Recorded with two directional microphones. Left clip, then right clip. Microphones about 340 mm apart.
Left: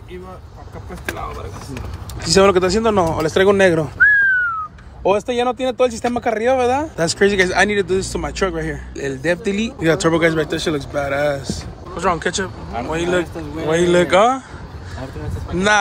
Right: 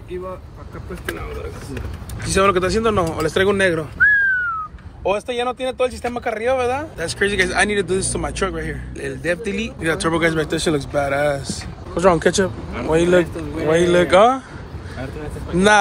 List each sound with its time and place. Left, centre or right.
2.2 s speech: centre
5.0 s speech: left; by 14.4 s centre
15.5 s speech: centre